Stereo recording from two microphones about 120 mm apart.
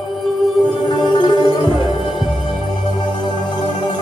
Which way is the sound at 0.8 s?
40° left (ahead or behind).